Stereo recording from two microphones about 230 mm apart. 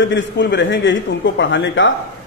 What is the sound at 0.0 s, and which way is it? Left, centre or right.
Speech, left.